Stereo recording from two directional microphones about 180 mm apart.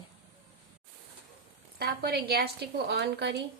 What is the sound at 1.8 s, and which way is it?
A woman's voice, 60° right (ahead or behind).